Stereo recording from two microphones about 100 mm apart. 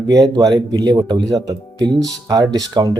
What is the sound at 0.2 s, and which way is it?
Speech, 40° right (ahead or behind).